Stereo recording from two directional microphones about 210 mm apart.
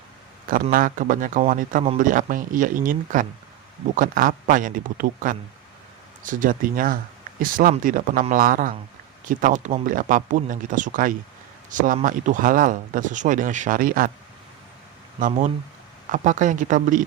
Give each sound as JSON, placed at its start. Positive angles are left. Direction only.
{"t": 0.5, "sound": "speech", "side_deg": -40}
{"t": 1.8, "sound": "speech", "side_deg": -30}
{"t": 2.0, "sound": "speech", "side_deg": -40}
{"t": 16.1, "sound": "speech", "side_deg": -35}